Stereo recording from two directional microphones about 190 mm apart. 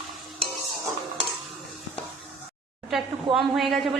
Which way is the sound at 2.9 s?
Centre (ahead or behind).